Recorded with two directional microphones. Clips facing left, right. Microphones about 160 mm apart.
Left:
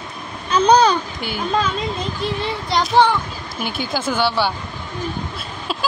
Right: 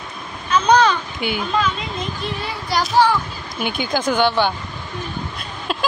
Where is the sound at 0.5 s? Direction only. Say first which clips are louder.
Left 1 dB; 35° left (ahead or behind).